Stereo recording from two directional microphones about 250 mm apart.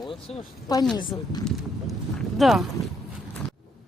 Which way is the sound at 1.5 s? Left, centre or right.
Centre.